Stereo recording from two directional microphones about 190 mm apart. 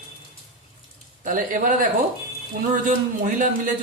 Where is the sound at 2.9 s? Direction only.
45° right (ahead or behind).